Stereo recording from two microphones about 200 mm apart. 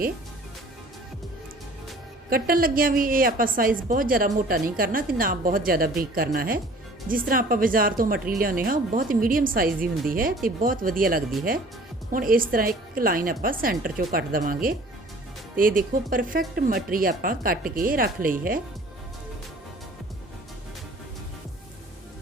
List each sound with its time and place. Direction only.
2.3 s speech: 45° right (ahead or behind)